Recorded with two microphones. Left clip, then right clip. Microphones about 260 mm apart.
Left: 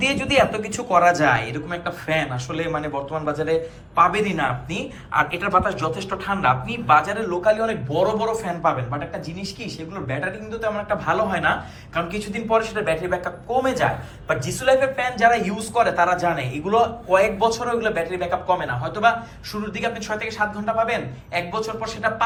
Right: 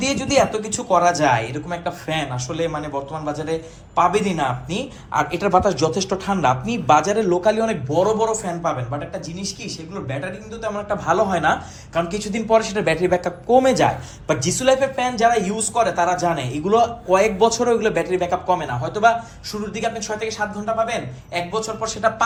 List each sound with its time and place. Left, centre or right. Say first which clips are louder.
0.0 s a man's voice: even; centre
10.1 s a man's voice: left 3 dB; centre